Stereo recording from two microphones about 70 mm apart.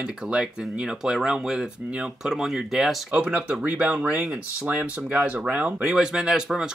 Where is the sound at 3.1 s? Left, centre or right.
Centre.